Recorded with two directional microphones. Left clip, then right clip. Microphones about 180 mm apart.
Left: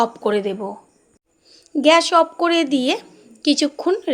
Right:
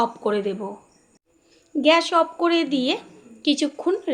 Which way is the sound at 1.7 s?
40° left (ahead or behind).